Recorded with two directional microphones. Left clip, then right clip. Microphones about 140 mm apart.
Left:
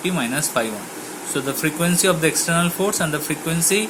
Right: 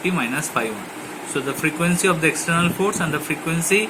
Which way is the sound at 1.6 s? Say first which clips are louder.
Even; 50° left (ahead or behind).